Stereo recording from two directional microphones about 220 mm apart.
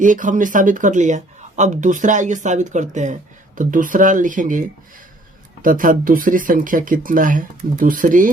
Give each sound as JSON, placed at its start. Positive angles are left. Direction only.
{"t": 0.0, "sound": "speech", "side_deg": -35}
{"t": 5.6, "sound": "speech", "side_deg": -40}